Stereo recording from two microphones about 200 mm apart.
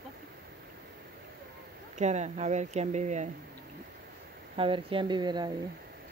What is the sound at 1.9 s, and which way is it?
Speech, 35° right (ahead or behind).